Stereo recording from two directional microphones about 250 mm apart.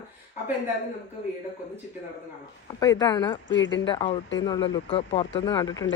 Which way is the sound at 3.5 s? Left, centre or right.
Left.